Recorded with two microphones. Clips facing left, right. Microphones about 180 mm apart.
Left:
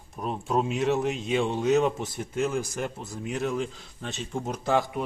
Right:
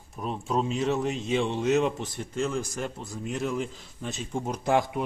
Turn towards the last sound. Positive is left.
turn(degrees=-15)  # may be behind; listen again after turning